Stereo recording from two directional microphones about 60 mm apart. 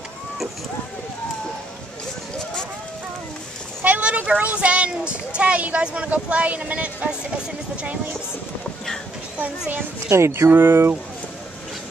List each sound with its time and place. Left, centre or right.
3.8 s a child's voice: right
10.0 s speech: right